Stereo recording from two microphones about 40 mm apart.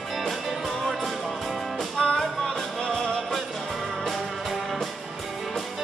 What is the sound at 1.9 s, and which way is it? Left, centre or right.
Music, centre.